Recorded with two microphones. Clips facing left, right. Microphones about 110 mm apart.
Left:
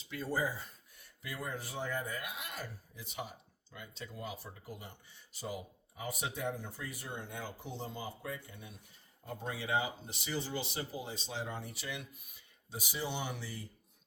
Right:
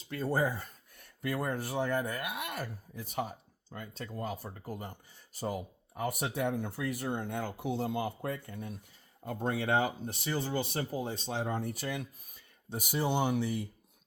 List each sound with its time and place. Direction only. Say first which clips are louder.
0.0 s speech: right 5 dB; 50° right (ahead or behind)